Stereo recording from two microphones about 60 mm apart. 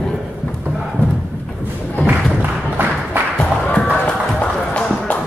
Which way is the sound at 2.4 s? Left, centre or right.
Right.